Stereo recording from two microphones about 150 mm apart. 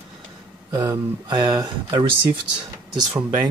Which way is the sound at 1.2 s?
30° right (ahead or behind).